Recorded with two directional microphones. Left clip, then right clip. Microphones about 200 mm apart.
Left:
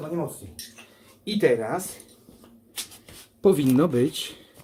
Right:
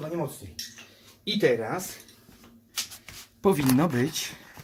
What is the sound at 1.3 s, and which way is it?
Speech, centre (ahead or behind).